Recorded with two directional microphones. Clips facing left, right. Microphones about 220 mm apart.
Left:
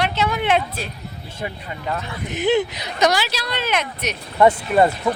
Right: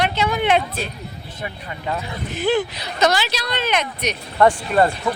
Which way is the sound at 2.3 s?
20° left (ahead or behind).